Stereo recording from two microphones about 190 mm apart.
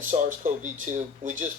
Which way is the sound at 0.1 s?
40° right (ahead or behind).